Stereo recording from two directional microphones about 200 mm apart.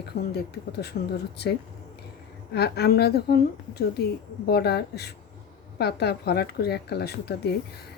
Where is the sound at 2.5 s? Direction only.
55° left (ahead or behind).